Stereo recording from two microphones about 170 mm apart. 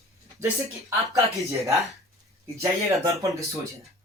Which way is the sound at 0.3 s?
15° right (ahead or behind).